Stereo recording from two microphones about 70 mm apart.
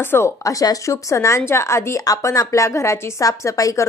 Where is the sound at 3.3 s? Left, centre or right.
Left.